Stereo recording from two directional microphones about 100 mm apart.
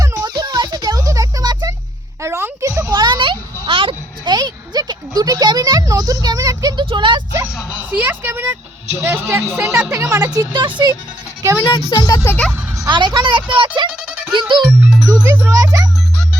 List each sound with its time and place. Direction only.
0.2 s a sound: 45° right (ahead or behind)
2.2 s a sound: 25° right (ahead or behind)
6.7 s vehicle: 50° right (ahead or behind)
7.9 s a sound: 15° right (ahead or behind)
9.0 s a man's voice: 25° right (ahead or behind)
10.3 s speech: 45° right (ahead or behind)
11.6 s speech: 45° left (ahead or behind)
12.2 s speech: 20° left (ahead or behind)
12.9 s speech: 50° right (ahead or behind)
14.7 s speech: 10° right (ahead or behind)
15.1 s a child's voice: 35° right (ahead or behind)